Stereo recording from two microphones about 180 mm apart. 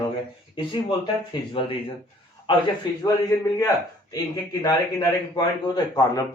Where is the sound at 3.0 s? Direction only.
20° left (ahead or behind).